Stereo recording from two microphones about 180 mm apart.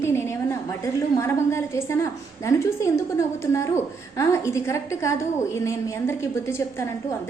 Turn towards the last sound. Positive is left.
turn(degrees=15)  # may be behind; listen again after turning